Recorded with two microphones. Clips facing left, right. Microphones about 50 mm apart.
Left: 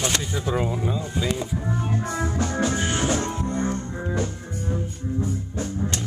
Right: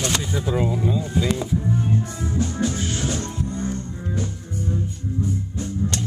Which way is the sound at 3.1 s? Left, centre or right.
Left.